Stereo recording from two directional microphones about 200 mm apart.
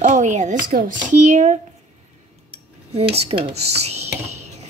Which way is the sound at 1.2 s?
35° right (ahead or behind).